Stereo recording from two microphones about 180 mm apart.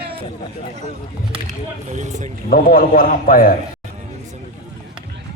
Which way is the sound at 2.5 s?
50° left (ahead or behind).